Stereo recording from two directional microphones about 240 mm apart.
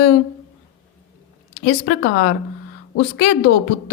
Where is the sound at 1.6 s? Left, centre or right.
Left.